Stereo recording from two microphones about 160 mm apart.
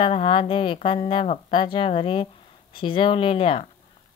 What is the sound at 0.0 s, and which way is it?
Speech, 35° left (ahead or behind).